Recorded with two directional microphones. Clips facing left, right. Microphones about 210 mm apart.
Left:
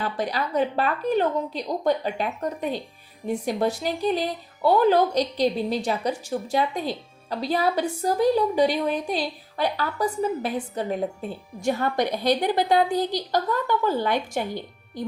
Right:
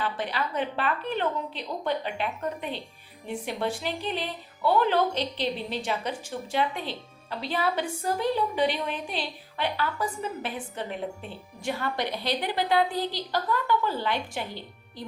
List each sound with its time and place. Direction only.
0.0 s a woman's voice: 40° left (ahead or behind)